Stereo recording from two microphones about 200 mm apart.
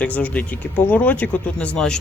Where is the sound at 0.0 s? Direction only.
5° left (ahead or behind).